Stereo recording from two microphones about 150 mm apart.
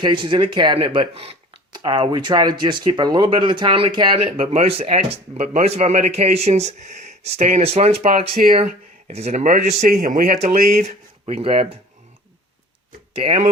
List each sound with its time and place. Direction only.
0.0 s speech: 35° right (ahead or behind)
1.7 s speech: 30° right (ahead or behind); by 9.9 s 50° right (ahead or behind)
9.9 s speech: 70° right (ahead or behind); by 10.6 s 50° right (ahead or behind)
11.3 s speech: 35° right (ahead or behind)
13.1 s speech: 40° right (ahead or behind)